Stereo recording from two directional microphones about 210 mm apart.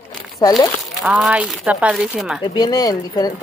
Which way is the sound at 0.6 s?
5° right (ahead or behind).